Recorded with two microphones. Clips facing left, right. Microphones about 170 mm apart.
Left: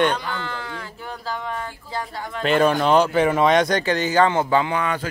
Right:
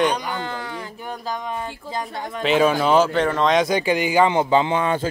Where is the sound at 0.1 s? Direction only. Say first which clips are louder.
Right 1 dB; 15° right (ahead or behind).